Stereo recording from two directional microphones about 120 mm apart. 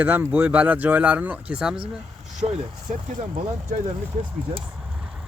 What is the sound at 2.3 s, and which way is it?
Speech, 70° right (ahead or behind).